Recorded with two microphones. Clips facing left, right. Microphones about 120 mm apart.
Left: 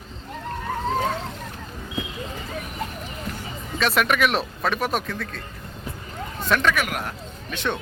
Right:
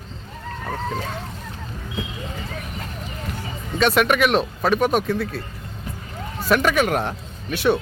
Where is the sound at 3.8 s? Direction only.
Centre (ahead or behind).